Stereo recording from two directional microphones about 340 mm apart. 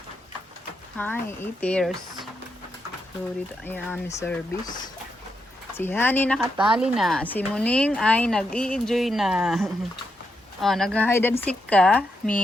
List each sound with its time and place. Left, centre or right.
0.9 s a woman's voice: centre
3.6 s a woman's voice: centre